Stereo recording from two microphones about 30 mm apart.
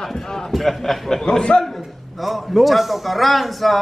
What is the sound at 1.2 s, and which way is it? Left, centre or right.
Speech, left.